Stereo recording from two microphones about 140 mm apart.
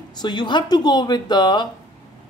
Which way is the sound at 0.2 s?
35° left (ahead or behind).